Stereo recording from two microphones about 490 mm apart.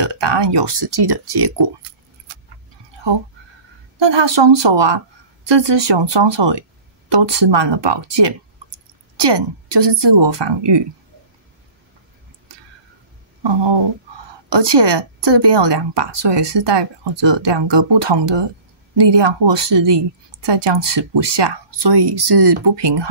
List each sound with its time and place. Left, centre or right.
0.0 s speech: right
4.0 s a woman's voice: right
13.4 s a sound: right
14.5 s a woman's voice: right